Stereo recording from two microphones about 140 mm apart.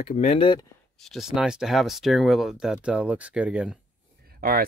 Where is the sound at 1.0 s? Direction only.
Centre (ahead or behind).